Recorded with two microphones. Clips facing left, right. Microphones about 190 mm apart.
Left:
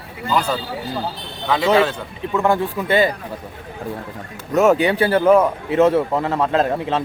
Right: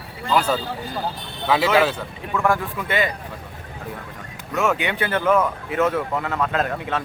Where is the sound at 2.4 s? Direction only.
25° left (ahead or behind).